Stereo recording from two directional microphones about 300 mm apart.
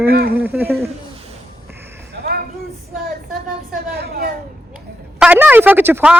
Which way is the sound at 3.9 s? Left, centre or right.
Right.